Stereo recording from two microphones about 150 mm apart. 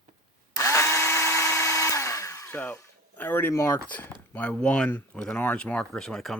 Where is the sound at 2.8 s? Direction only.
15° left (ahead or behind).